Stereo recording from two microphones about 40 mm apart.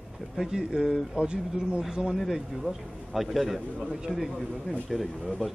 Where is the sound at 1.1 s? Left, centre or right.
Right.